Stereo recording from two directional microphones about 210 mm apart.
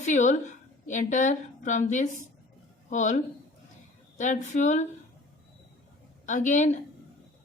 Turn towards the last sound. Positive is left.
turn(degrees=35)  # may be behind; listen again after turning